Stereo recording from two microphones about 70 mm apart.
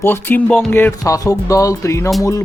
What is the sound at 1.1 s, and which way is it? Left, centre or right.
Speech, left.